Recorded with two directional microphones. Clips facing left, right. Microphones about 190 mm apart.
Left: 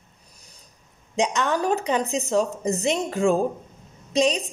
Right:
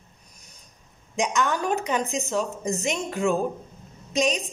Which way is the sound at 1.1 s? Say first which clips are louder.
Left 2 dB; 30° left (ahead or behind).